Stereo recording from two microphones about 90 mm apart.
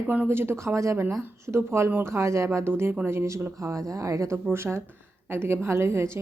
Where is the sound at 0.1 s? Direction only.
25° right (ahead or behind).